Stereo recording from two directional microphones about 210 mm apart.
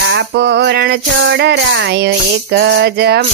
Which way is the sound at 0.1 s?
55° right (ahead or behind).